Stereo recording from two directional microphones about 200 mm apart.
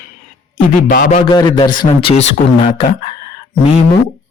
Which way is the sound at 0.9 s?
40° left (ahead or behind).